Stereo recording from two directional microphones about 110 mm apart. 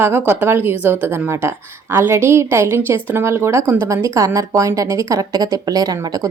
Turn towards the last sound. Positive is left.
turn(degrees=-35)  # may be behind; listen again after turning